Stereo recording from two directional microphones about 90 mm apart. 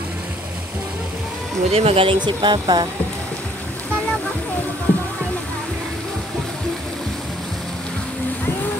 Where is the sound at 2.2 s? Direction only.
55° right (ahead or behind).